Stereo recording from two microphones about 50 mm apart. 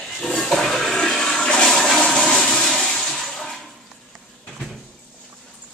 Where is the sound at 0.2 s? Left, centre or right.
Centre.